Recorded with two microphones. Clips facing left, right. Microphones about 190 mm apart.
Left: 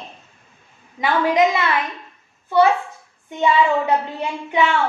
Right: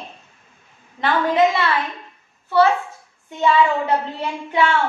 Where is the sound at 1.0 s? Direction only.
15° left (ahead or behind).